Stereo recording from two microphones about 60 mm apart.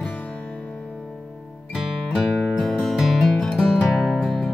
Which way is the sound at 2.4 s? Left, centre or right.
Centre.